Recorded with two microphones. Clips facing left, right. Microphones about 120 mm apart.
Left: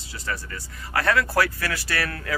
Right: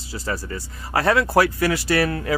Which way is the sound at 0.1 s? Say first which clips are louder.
Right 5 dB; 30° right (ahead or behind).